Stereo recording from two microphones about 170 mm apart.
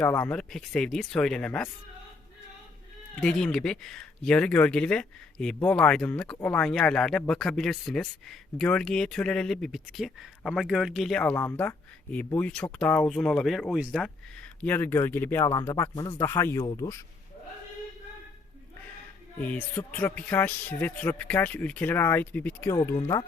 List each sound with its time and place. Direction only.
0.0 s speech: 10° left (ahead or behind)
3.2 s speech: 5° left (ahead or behind); by 17.0 s 20° left (ahead or behind)
19.5 s speech: 10° left (ahead or behind)
22.7 s speech: 25° left (ahead or behind)